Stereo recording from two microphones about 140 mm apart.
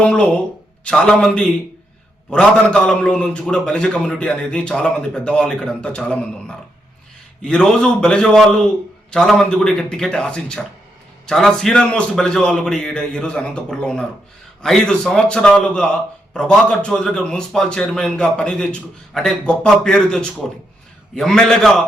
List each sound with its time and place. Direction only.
0.0 s a man's voice: 10° left (ahead or behind)